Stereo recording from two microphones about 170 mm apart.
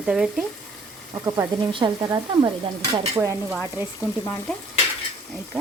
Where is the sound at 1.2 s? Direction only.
25° right (ahead or behind).